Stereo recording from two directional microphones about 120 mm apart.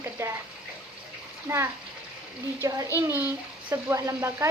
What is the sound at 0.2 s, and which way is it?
Speech, 25° right (ahead or behind).